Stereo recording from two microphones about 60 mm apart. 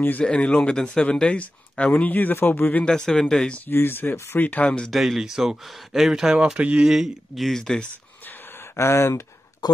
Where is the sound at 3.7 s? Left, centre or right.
Left.